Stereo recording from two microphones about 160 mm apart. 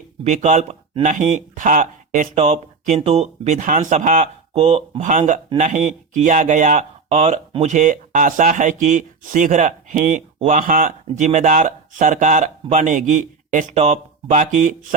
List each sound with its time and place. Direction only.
0.3 s speech: 45° right (ahead or behind)